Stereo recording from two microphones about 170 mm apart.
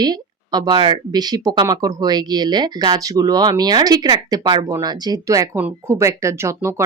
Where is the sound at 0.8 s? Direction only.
25° right (ahead or behind).